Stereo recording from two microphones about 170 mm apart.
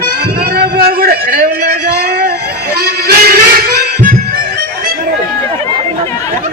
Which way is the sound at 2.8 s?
65° right (ahead or behind).